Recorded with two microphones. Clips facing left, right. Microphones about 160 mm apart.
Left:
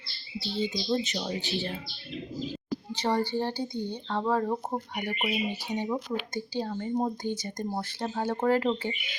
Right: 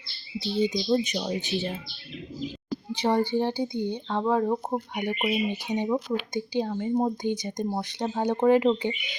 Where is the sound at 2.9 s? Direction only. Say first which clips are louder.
Right 4 dB; 10° right (ahead or behind).